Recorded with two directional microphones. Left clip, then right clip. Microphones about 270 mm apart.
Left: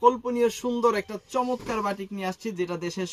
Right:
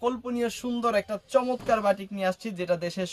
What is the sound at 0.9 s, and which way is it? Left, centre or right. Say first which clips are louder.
Speech: right 2 dB; centre.